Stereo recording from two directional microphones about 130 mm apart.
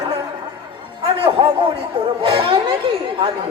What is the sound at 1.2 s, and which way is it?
Speech, 45° right (ahead or behind).